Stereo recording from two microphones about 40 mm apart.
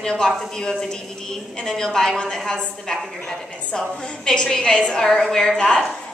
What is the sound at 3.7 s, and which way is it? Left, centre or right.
A woman's voice, centre.